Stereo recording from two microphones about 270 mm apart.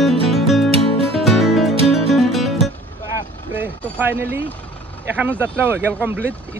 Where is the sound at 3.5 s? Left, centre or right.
Centre.